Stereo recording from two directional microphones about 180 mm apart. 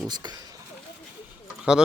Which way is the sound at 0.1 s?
25° right (ahead or behind).